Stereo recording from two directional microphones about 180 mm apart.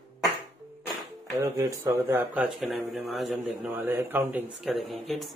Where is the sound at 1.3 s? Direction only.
15° right (ahead or behind).